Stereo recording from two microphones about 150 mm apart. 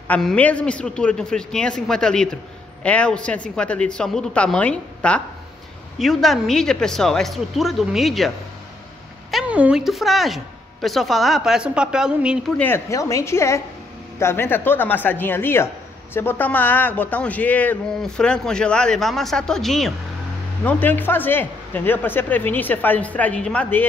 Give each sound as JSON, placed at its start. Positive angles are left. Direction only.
{"t": 0.1, "sound": "speech", "side_deg": 5}
{"t": 9.3, "sound": "speech", "side_deg": -5}
{"t": 12.5, "sound": "a woman's voice", "side_deg": 15}
{"t": 20.6, "sound": "speech", "side_deg": 10}